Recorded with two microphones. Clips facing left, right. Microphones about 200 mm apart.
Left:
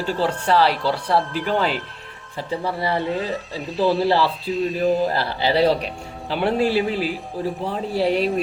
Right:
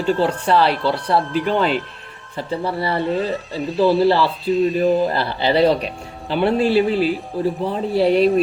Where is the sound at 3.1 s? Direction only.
Centre (ahead or behind).